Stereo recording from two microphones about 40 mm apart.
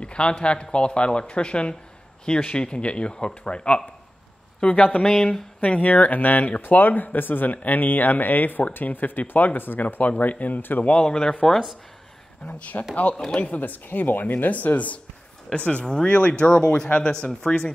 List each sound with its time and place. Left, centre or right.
0.0 s speech: left
5.0 s speech: centre
5.6 s speech: left
10.8 s speech: left
12.4 s speech: left
13.4 s speech: left
15.5 s speech: left